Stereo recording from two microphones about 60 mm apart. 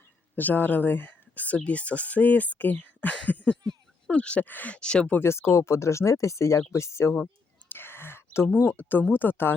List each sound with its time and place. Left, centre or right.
0.3 s speech: left
4.4 s speech: left
4.7 s speech: centre
5.2 s speech: left
7.7 s whispering: left
8.6 s speech: left